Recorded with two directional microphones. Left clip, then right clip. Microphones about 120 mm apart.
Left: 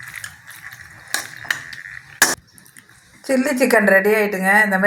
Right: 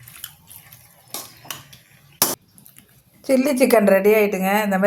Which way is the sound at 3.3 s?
25° right (ahead or behind).